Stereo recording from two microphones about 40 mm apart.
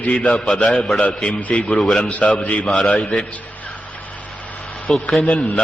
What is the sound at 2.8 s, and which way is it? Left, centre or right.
Speech, left.